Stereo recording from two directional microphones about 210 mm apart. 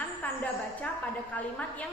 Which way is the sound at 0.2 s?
5° left (ahead or behind).